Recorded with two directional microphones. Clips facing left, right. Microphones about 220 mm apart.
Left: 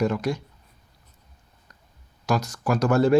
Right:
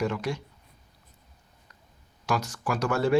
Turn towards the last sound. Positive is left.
turn(degrees=40)  # may be behind; listen again after turning